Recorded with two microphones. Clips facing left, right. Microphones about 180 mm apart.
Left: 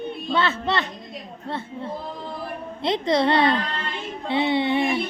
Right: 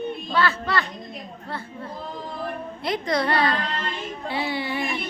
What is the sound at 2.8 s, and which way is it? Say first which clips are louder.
A woman's voice: left 4 dB; 25° left (ahead or behind).